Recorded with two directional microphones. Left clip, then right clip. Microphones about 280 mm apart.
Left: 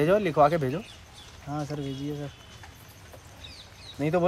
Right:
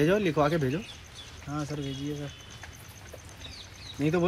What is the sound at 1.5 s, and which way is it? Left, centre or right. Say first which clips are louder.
Speech: left 2 dB; left.